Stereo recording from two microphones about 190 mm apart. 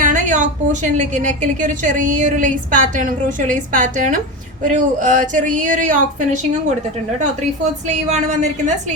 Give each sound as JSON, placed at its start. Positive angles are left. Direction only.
{"t": 0.0, "sound": "a woman's voice", "side_deg": -40}